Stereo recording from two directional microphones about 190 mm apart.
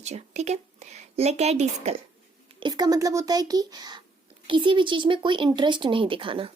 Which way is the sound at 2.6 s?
20° right (ahead or behind).